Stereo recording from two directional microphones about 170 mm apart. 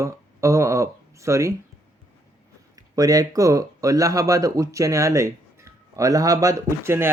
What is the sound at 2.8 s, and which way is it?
Speech, 20° right (ahead or behind).